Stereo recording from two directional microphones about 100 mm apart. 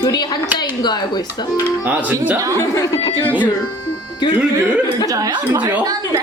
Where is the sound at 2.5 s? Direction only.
30° left (ahead or behind).